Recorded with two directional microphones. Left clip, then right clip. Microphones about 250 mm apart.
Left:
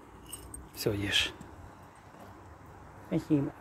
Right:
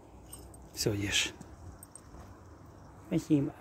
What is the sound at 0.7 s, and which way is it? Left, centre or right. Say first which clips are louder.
Speech: left 2 dB; centre.